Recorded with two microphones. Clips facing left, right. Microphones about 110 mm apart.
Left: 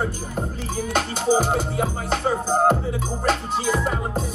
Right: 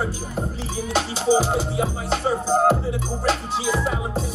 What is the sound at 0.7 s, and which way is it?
Music, 45° left (ahead or behind).